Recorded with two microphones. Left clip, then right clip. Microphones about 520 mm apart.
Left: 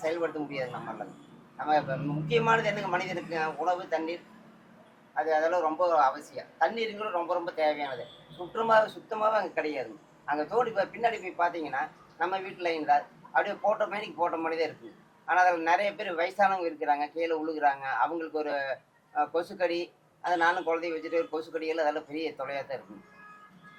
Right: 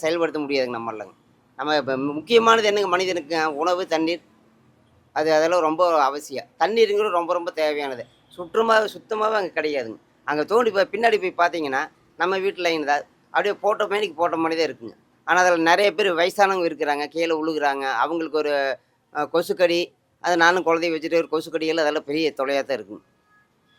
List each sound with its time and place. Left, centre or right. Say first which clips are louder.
0.0 s a man's voice: right 8 dB; right
5.1 s a man's voice: right 8 dB; right